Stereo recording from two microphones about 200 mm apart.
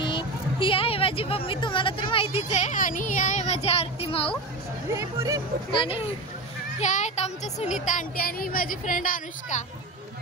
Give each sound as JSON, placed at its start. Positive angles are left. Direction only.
{"t": 0.0, "sound": "speech", "side_deg": 25}
{"t": 4.9, "sound": "speech", "side_deg": -15}
{"t": 5.7, "sound": "speech", "side_deg": 30}